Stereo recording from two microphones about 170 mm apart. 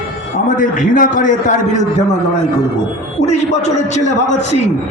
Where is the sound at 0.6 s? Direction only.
50° left (ahead or behind).